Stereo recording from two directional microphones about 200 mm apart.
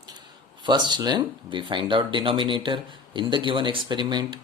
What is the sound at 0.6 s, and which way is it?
Speech, 20° right (ahead or behind).